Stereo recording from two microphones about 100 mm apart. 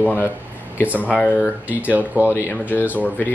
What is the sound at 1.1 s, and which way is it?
Speech, 15° left (ahead or behind).